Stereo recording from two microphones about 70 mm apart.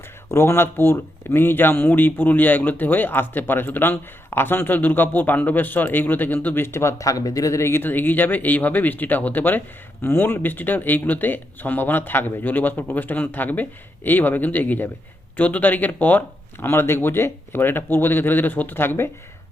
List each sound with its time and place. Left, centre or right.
0.3 s speech: left
7.0 s speech: left
7.6 s speech: left